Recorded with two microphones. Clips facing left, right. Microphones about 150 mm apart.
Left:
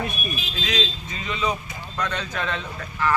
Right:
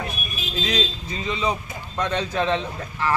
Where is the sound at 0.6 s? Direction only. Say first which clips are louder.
Right 2 dB; 35° right (ahead or behind).